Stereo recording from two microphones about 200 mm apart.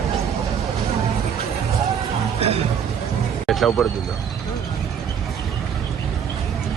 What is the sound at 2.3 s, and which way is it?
Music, 30° right (ahead or behind).